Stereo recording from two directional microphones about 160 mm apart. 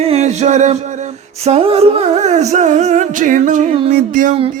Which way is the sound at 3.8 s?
55° right (ahead or behind).